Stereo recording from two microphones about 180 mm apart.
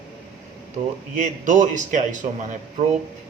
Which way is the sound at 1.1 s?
45° right (ahead or behind).